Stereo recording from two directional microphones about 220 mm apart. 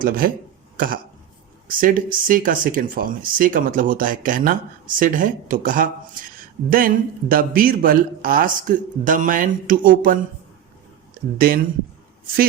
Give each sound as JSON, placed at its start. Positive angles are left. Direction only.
{"t": 0.0, "sound": "speech", "side_deg": -40}
{"t": 11.3, "sound": "speech", "side_deg": -40}